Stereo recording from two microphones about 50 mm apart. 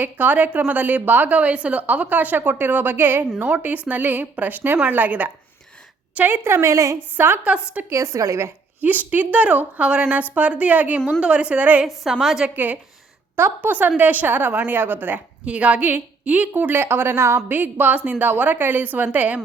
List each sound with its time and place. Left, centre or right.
0.0 s a woman's voice: right
6.4 s a woman's voice: right
7.5 s a woman's voice: right
7.9 s a woman's voice: right
8.8 s a woman's voice: right
12.2 s a woman's voice: centre
12.5 s a woman's voice: right
15.4 s a woman's voice: right
16.8 s a woman's voice: right
17.5 s a woman's voice: right